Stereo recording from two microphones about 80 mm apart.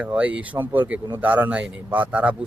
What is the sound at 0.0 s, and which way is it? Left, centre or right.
Speech, centre.